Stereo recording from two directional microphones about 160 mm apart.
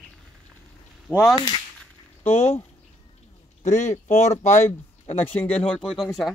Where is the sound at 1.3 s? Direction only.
30° left (ahead or behind).